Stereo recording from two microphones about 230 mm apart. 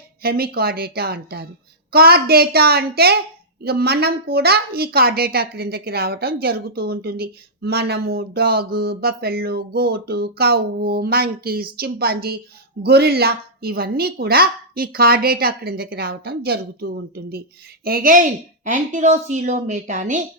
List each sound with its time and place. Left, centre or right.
0.2 s a woman's voice: right